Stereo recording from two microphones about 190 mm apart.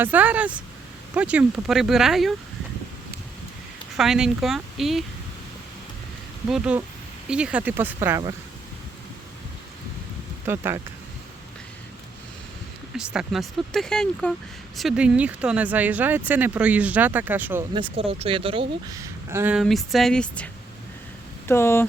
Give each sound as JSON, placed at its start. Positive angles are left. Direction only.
{"t": 0.0, "sound": "speech", "side_deg": -10}
{"t": 3.9, "sound": "speech", "side_deg": 0}
{"t": 6.5, "sound": "speech", "side_deg": -5}
{"t": 10.4, "sound": "speech", "side_deg": -10}
{"t": 13.0, "sound": "speech", "side_deg": -5}
{"t": 17.7, "sound": "speech", "side_deg": -30}
{"t": 18.9, "sound": "speech", "side_deg": -15}
{"t": 19.6, "sound": "speech", "side_deg": 0}